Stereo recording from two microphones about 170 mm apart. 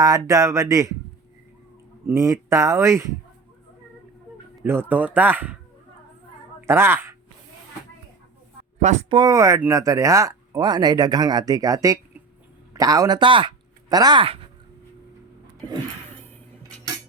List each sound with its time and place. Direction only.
0.0 s speech: 20° right (ahead or behind)
2.0 s speech: 15° right (ahead or behind)
4.6 s speech: 15° right (ahead or behind)
6.7 s speech: 15° right (ahead or behind)
8.8 s speech: 45° right (ahead or behind)
9.0 s speech: 25° right (ahead or behind)